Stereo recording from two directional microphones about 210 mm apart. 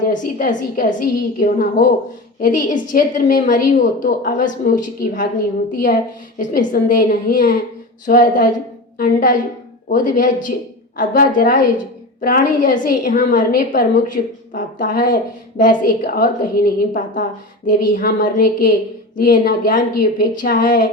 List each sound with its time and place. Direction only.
0.1 s a woman's voice: 40° left (ahead or behind)
6.4 s a woman's voice: 40° left (ahead or behind)